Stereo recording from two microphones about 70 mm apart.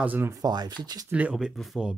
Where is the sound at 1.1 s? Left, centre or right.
Centre.